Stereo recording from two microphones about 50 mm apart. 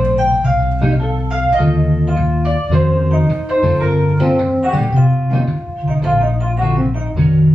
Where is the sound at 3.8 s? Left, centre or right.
Centre.